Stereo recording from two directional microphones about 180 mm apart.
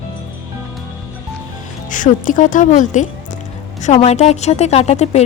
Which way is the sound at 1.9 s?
45° left (ahead or behind).